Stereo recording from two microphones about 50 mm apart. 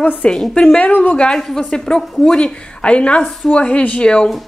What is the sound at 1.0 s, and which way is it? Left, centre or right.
Speech, left.